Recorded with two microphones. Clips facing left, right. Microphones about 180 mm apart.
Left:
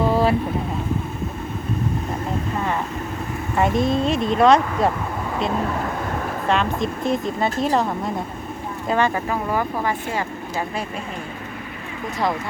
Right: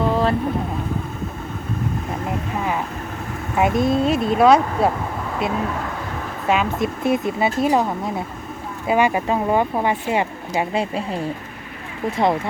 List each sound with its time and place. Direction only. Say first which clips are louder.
0.1 s boat: left 1 dB; 10° left (ahead or behind)
3.5 s speech: right 1 dB; 5° right (ahead or behind)
6.5 s speech: right 2 dB; 5° right (ahead or behind)
9.2 s speech: right 4 dB; 25° right (ahead or behind)
10.8 s speech: right 6 dB; 30° right (ahead or behind)